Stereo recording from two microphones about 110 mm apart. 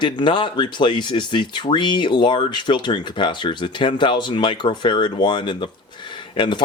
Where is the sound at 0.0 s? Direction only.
45° left (ahead or behind).